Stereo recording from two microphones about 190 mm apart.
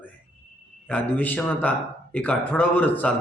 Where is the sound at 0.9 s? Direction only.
10° left (ahead or behind).